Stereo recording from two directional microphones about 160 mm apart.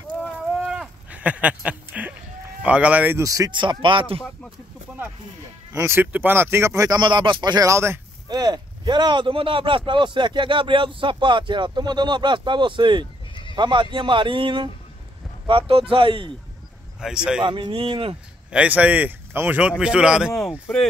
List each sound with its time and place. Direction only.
0.5 s a sound: 5° right (ahead or behind)
2.6 s speech: 10° right (ahead or behind); by 4.2 s 30° right (ahead or behind)
5.7 s speech: 15° right (ahead or behind)
13.3 s neigh: 30° left (ahead or behind)
13.6 s speech: 30° right (ahead or behind)
17.0 s speech: 5° right (ahead or behind)
17.4 s speech: 30° right (ahead or behind)
18.5 s speech: 10° right (ahead or behind)